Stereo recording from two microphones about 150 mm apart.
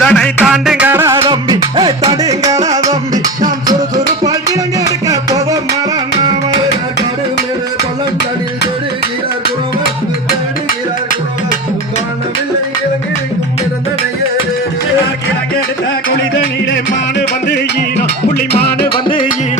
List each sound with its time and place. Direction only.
0.0 s music: 5° left (ahead or behind); by 1.2 s 15° right (ahead or behind)
1.2 s music: 30° right (ahead or behind)
17.9 s music: 90° left